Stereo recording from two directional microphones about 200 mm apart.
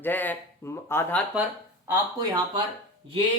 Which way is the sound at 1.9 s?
20° right (ahead or behind).